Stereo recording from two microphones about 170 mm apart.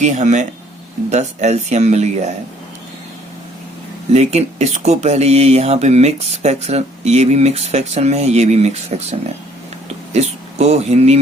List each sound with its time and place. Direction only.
0.0 s speech: 45° right (ahead or behind)
4.1 s speech: 40° right (ahead or behind)